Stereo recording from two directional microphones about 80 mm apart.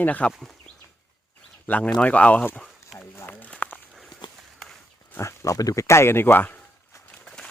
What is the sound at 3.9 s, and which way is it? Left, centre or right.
Walk, centre.